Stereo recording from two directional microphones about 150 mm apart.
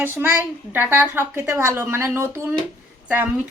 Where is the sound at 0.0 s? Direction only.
15° right (ahead or behind).